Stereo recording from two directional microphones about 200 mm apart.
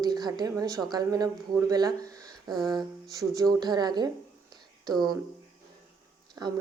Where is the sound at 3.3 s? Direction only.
20° right (ahead or behind).